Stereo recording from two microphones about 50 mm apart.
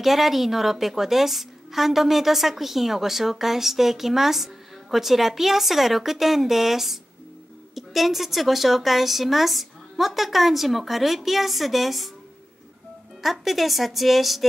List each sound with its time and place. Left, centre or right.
0.0 s a woman's voice: centre
13.2 s a woman's voice: centre